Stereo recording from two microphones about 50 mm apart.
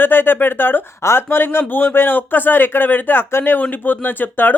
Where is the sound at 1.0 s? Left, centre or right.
Left.